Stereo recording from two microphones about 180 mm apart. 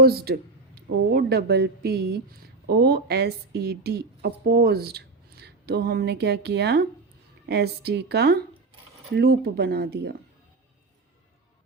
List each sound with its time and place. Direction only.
0.0 s speech: 60° right (ahead or behind)